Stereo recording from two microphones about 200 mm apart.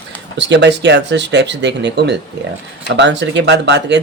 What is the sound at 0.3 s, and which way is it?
Speech, 60° right (ahead or behind).